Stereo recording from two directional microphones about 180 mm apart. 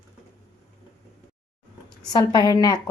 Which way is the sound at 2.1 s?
20° left (ahead or behind).